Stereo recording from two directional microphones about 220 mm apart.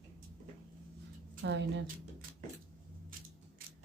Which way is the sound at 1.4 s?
50° right (ahead or behind).